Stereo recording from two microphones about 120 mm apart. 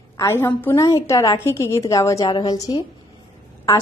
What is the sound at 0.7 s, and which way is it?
A woman's voice, 30° left (ahead or behind).